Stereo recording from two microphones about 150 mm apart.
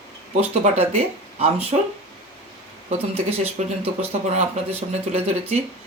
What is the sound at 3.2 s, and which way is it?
Speech, 40° right (ahead or behind).